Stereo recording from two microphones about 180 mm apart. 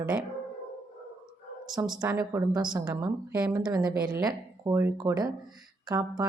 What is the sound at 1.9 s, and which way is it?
A woman's voice, 20° right (ahead or behind).